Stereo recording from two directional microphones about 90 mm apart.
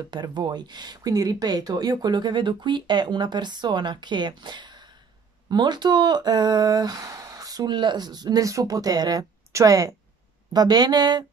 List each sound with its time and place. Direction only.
0.1 s speech: 55° right (ahead or behind)
7.7 s speech: 55° right (ahead or behind)